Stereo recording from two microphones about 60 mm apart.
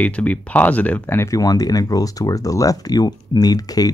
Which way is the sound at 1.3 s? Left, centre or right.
Left.